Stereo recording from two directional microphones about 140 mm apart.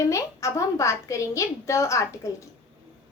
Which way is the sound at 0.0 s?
20° left (ahead or behind).